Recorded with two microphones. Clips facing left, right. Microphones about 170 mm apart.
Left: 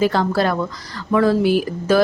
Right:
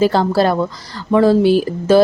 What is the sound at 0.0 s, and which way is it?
A woman's voice, 30° right (ahead or behind).